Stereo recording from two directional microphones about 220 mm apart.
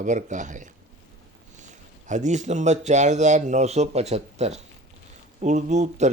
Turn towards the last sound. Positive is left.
turn(degrees=-30)  # may be behind; listen again after turning